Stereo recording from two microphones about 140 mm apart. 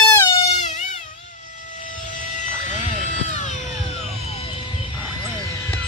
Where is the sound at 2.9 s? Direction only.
60° left (ahead or behind).